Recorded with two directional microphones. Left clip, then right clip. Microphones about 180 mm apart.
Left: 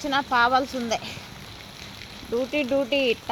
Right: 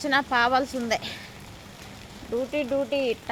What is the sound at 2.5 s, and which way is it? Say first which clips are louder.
Speech: left 3 dB; 30° left (ahead or behind).